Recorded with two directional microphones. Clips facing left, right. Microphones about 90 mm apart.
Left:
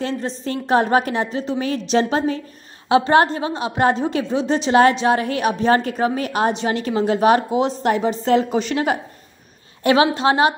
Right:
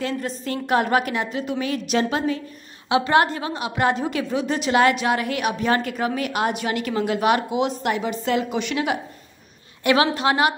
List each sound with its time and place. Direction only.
0.0 s a woman's voice: 30° left (ahead or behind)